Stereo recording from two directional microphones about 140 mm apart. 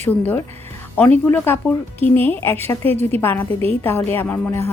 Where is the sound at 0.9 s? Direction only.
15° left (ahead or behind).